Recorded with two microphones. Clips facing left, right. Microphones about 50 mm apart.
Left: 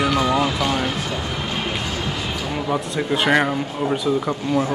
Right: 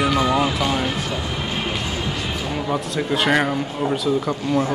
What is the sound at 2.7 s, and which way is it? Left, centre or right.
Speech, centre.